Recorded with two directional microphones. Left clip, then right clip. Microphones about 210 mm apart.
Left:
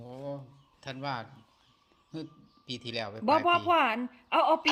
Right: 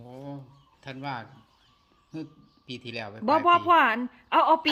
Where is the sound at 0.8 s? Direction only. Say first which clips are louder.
Right 1 dB; 50° left (ahead or behind).